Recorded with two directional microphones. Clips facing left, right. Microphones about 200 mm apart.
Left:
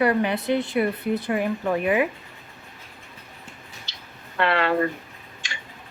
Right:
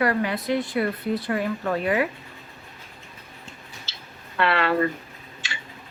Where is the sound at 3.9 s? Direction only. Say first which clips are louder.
Right 1 dB; 15° left (ahead or behind).